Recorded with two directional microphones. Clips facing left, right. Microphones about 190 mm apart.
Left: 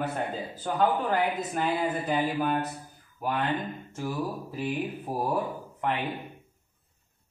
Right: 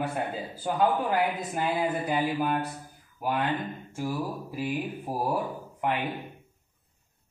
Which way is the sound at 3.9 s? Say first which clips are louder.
Right 1 dB; 10° right (ahead or behind).